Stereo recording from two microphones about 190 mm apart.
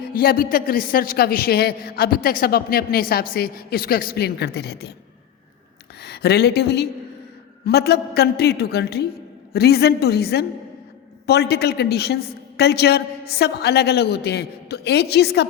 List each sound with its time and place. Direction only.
0.1 s a man's voice: 50° left (ahead or behind)
6.0 s a woman's voice: 60° left (ahead or behind)